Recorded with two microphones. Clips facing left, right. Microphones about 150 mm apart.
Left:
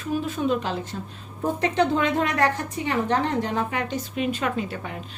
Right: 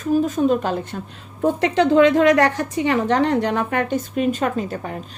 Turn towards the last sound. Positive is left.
turn(degrees=-40)  # may be behind; listen again after turning